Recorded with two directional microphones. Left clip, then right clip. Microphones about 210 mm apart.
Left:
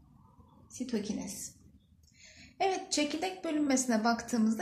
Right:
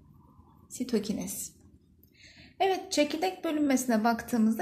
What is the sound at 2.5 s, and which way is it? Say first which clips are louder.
A woman's voice: right 4 dB; 35° right (ahead or behind).